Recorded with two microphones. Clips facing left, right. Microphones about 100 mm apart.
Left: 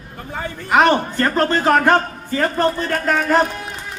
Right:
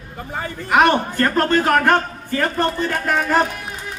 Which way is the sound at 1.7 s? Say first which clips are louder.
Left 1 dB; 15° left (ahead or behind).